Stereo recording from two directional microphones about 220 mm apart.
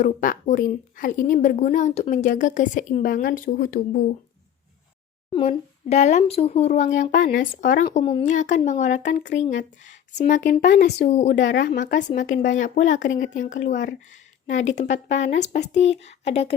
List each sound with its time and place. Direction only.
0.0 s a woman's voice: 35° left (ahead or behind)
5.3 s a woman's voice: 30° left (ahead or behind)
11.3 s speech: 60° left (ahead or behind)
11.6 s a woman's voice: 40° left (ahead or behind)